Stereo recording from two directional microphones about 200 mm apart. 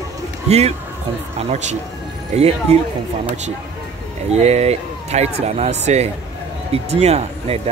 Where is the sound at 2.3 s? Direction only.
35° right (ahead or behind).